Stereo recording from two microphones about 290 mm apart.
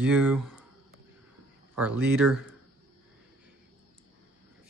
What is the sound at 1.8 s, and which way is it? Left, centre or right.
Speech, centre.